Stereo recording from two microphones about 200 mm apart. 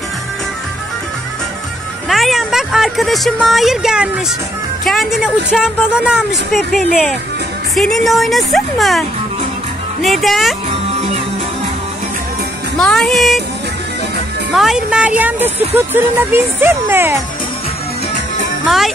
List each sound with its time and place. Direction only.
2.0 s speech: centre (ahead or behind)
10.0 s speech: centre (ahead or behind)
10.7 s music: 30° right (ahead or behind)
12.7 s speech: centre (ahead or behind)
14.5 s speech: centre (ahead or behind)